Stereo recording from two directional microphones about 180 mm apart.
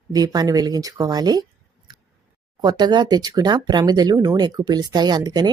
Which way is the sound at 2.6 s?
25° right (ahead or behind).